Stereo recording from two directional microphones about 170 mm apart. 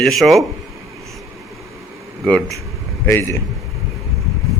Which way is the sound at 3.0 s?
15° left (ahead or behind).